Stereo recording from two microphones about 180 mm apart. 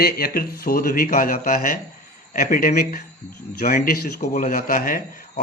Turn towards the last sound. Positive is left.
turn(degrees=50)  # may be behind; listen again after turning